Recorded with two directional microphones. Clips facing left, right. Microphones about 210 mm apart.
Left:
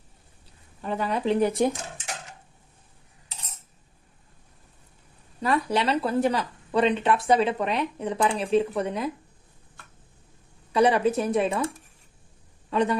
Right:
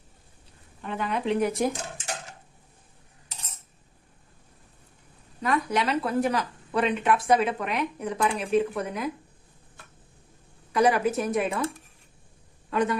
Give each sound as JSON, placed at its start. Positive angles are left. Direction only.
{"t": 0.8, "sound": "speech", "side_deg": 35}
{"t": 5.4, "sound": "speech", "side_deg": 30}
{"t": 10.7, "sound": "a woman's voice", "side_deg": 30}
{"t": 12.7, "sound": "speech", "side_deg": 30}